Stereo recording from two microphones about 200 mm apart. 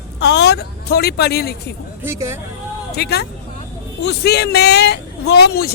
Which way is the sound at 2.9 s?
55° left (ahead or behind).